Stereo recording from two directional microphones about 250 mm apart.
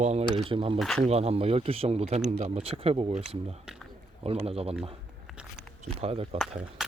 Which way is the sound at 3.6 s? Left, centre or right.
Centre.